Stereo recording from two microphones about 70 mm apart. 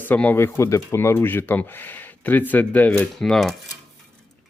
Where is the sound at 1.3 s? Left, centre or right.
Left.